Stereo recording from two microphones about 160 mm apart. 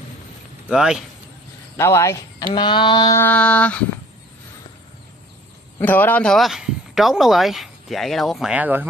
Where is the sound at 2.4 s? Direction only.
30° left (ahead or behind).